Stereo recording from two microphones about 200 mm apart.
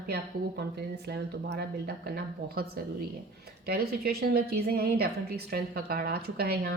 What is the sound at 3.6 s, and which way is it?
A woman's voice, 50° right (ahead or behind).